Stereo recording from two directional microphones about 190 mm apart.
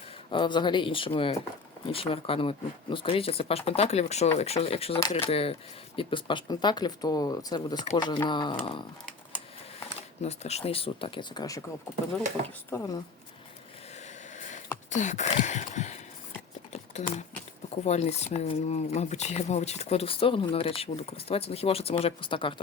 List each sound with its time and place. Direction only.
0.3 s speech: 25° left (ahead or behind)
10.2 s speech: 35° left (ahead or behind)
12.7 s a woman's voice: 15° left (ahead or behind)
13.9 s a sound: 40° left (ahead or behind)
16.9 s speech: 40° left (ahead or behind)